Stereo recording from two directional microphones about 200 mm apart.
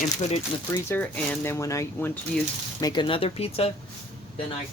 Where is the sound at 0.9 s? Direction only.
10° left (ahead or behind); by 3.7 s 30° left (ahead or behind).